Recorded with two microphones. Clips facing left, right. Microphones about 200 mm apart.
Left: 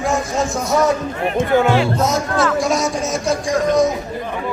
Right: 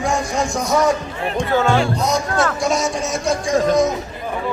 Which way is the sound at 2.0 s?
Centre (ahead or behind).